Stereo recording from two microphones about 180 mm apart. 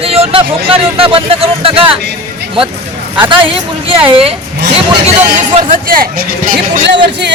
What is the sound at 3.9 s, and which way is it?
Speech, 30° right (ahead or behind).